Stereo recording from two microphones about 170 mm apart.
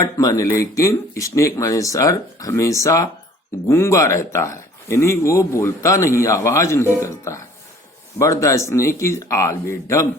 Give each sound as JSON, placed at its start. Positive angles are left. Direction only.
{"t": 0.0, "sound": "speech", "side_deg": 20}